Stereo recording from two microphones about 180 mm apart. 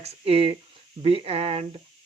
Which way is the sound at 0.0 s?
35° right (ahead or behind).